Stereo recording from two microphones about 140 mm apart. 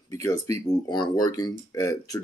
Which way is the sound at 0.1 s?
20° left (ahead or behind).